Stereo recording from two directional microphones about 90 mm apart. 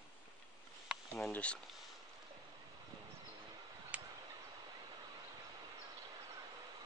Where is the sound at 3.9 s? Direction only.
15° right (ahead or behind).